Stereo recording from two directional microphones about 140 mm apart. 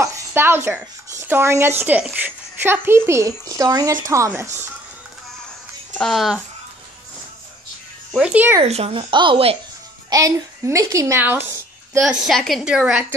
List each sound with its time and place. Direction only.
0.0 s a sound: 20° right (ahead or behind)
1.2 s a woman's voice: 15° right (ahead or behind)
5.9 s a woman's voice: centre (ahead or behind)
8.1 s a woman's voice: 5° right (ahead or behind)
8.6 s speech: 45° right (ahead or behind)
10.0 s speech: 25° right (ahead or behind)
12.0 s a woman's voice: 5° right (ahead or behind)